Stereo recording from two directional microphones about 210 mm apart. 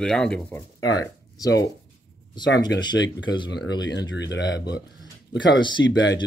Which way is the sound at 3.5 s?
55° left (ahead or behind).